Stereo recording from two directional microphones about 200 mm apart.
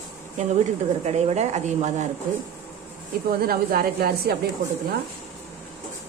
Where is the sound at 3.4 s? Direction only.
50° right (ahead or behind).